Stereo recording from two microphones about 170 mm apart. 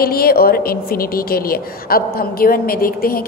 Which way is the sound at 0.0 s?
60° left (ahead or behind).